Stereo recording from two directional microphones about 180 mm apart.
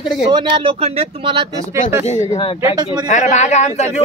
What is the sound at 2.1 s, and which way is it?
Speech, 35° left (ahead or behind).